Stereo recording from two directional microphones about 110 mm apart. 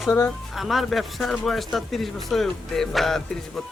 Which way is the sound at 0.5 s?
Centre (ahead or behind).